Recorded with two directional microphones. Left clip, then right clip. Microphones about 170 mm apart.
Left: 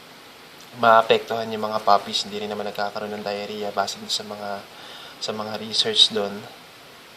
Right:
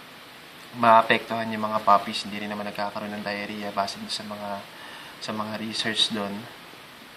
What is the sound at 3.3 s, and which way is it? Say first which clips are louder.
Speech: left 2 dB; 25° left (ahead or behind).